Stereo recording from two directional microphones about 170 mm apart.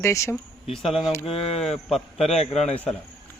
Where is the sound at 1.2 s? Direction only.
35° left (ahead or behind).